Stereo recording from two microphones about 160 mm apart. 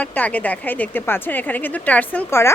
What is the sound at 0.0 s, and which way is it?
Speech, 10° left (ahead or behind).